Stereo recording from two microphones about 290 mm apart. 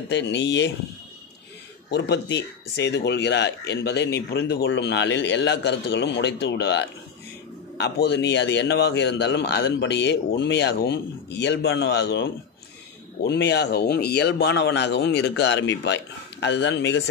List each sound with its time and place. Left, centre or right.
0.1 s speech: left
1.9 s speech: left